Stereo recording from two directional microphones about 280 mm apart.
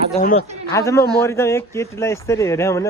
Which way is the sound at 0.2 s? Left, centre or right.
Left.